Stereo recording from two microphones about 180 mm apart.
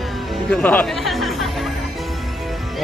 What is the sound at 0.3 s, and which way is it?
Music, 5° left (ahead or behind).